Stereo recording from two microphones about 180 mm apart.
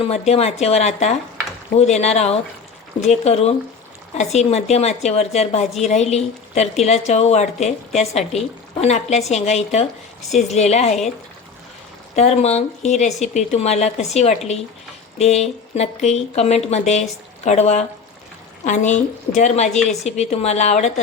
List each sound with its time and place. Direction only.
0.0 s speech: 35° left (ahead or behind)
12.1 s speech: 35° left (ahead or behind)